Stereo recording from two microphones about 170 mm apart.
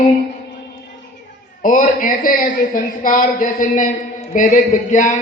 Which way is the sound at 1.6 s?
50° left (ahead or behind).